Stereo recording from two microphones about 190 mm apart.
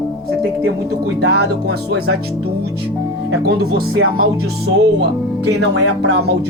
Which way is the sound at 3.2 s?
60° right (ahead or behind).